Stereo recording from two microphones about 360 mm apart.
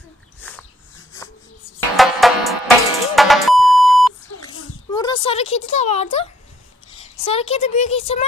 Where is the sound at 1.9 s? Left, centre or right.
Centre.